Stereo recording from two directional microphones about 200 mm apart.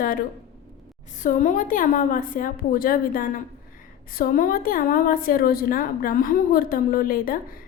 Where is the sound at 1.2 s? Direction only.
40° left (ahead or behind).